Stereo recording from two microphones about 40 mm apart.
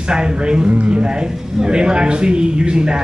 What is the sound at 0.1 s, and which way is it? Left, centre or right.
A man's voice, right.